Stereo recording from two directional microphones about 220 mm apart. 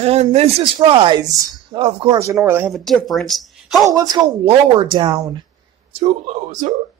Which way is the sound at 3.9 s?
20° right (ahead or behind).